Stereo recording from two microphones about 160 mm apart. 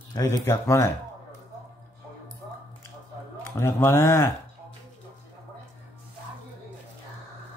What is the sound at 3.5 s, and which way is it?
Speech, 15° left (ahead or behind).